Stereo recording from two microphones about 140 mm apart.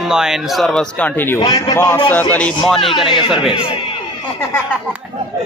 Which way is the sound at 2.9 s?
40° left (ahead or behind).